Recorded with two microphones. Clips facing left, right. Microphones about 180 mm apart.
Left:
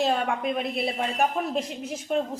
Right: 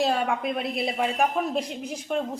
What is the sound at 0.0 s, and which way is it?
A woman's voice, centre (ahead or behind).